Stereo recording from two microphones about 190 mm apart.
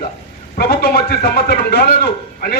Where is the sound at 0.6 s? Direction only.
55° left (ahead or behind).